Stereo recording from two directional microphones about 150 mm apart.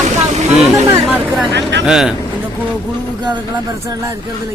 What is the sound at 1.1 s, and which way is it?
Speech, 5° right (ahead or behind).